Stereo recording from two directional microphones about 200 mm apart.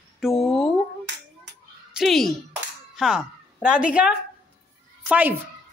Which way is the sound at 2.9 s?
5° right (ahead or behind).